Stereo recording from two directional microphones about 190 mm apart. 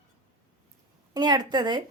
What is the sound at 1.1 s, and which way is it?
Speech, 20° right (ahead or behind).